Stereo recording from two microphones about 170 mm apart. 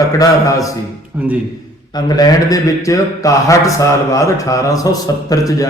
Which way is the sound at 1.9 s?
25° left (ahead or behind).